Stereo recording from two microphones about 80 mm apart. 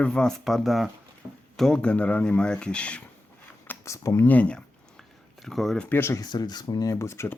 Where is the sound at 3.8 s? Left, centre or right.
Left.